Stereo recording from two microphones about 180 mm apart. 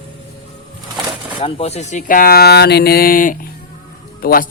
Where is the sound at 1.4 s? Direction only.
35° left (ahead or behind).